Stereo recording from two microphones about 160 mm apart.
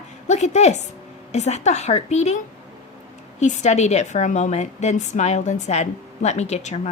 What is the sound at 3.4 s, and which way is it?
A woman's voice, 45° left (ahead or behind).